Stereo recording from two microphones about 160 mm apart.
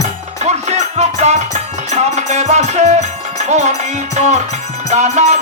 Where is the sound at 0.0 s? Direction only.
45° right (ahead or behind).